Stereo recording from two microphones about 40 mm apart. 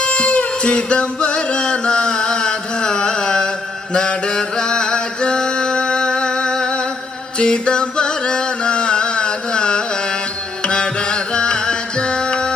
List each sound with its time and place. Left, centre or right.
0.0 s music: left
3.9 s mantra: left
7.3 s music: left